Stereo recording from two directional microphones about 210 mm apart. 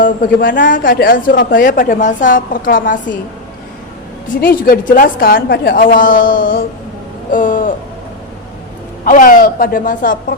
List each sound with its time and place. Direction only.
0.0 s a woman's voice: 40° left (ahead or behind)
4.4 s a woman's voice: 45° left (ahead or behind)
9.0 s a woman's voice: 40° left (ahead or behind)